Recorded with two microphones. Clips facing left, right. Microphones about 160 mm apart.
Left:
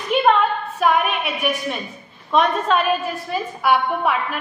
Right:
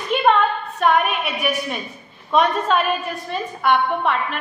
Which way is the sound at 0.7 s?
Centre (ahead or behind).